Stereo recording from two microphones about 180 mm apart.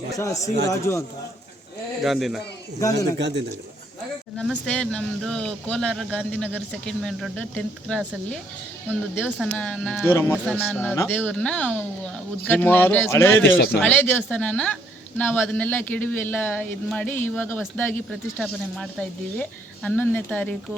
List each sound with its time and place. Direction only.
0.2 s a man's voice: 15° left (ahead or behind)
2.0 s speech: centre (ahead or behind)
2.8 s speech: 20° left (ahead or behind)
3.2 s speech: 75° right (ahead or behind)
4.4 s a man's voice: 5° left (ahead or behind)